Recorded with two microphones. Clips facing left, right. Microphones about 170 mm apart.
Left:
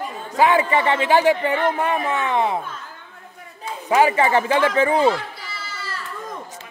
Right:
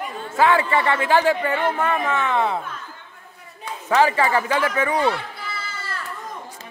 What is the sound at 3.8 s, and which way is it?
Speech, 15° left (ahead or behind).